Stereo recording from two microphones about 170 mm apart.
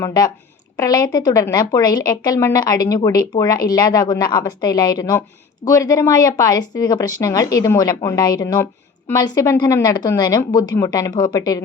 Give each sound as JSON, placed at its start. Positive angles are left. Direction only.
{"t": 0.0, "sound": "a woman's voice", "side_deg": 20}